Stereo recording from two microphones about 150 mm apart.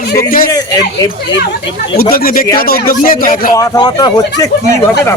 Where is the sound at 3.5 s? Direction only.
25° left (ahead or behind).